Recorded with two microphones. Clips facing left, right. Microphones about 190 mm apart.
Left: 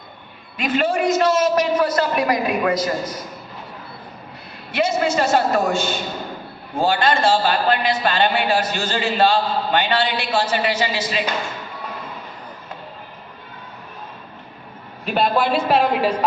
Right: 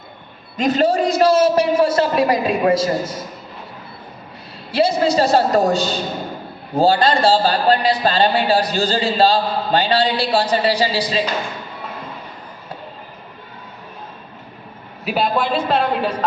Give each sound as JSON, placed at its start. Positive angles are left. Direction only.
{"t": 0.5, "sound": "a man's voice", "side_deg": -40}
{"t": 4.7, "sound": "a man's voice", "side_deg": -35}
{"t": 15.0, "sound": "a man's voice", "side_deg": 0}